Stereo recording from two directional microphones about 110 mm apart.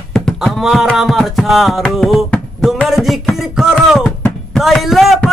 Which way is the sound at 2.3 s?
Centre (ahead or behind).